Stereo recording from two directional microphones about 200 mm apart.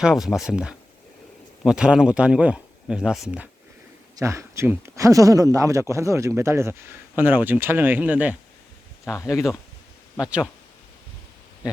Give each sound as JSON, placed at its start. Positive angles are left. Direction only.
{"t": 0.0, "sound": "speech", "side_deg": 0}
{"t": 9.0, "sound": "speech", "side_deg": 15}
{"t": 10.2, "sound": "speech", "side_deg": -5}